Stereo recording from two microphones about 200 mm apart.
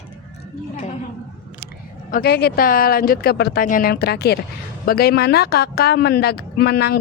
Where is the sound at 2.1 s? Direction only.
50° left (ahead or behind).